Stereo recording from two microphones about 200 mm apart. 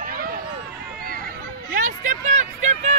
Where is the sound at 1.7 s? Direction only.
40° right (ahead or behind).